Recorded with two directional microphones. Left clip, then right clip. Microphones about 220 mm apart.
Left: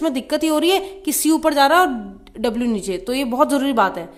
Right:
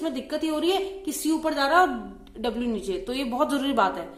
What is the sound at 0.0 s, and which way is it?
A woman's voice, 40° left (ahead or behind).